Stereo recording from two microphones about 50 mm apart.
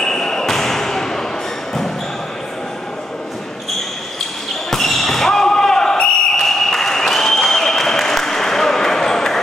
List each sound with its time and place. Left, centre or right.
0.0 s basketball bounce: centre
4.6 s basketball bounce: centre